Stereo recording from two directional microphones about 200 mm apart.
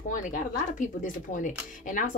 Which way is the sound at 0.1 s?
40° left (ahead or behind).